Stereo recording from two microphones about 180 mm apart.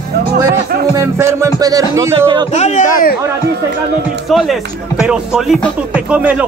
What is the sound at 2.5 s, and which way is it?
Speech, 40° left (ahead or behind).